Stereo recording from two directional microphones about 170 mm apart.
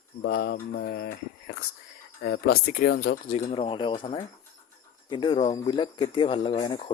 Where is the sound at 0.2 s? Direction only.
65° left (ahead or behind).